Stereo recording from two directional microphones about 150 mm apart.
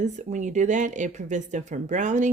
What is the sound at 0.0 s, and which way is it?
Speech, 55° right (ahead or behind).